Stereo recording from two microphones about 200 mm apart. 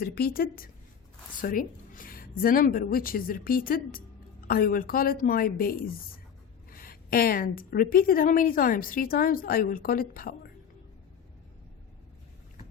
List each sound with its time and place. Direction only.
0.0 s a woman's voice: 50° left (ahead or behind)